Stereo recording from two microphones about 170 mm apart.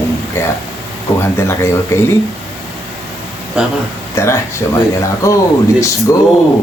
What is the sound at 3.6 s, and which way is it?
Speech, 5° right (ahead or behind).